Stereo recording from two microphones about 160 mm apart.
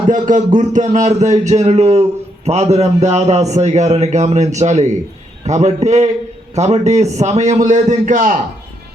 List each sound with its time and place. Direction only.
0.1 s a man's voice: 55° right (ahead or behind)